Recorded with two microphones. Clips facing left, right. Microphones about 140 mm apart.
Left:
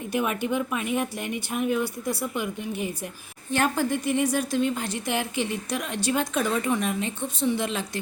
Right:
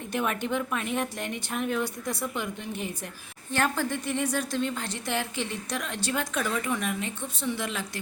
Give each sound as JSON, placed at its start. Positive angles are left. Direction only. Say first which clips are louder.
{"t": 0.1, "sound": "a woman's voice", "louder": "left 2 dB", "side_deg": 10}